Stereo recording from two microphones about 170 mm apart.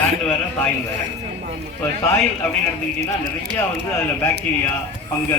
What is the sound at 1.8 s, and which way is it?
Speech, 10° left (ahead or behind).